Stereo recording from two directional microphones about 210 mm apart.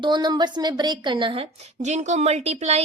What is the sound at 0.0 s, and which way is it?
A woman's voice, 20° right (ahead or behind).